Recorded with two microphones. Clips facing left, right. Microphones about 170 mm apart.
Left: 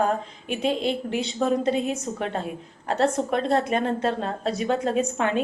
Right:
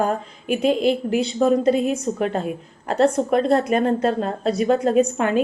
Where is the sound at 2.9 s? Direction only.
40° right (ahead or behind).